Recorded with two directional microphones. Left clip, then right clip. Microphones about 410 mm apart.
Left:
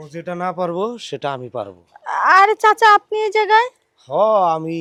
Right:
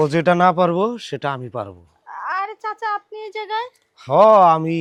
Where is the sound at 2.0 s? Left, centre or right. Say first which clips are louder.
Left 13 dB; left.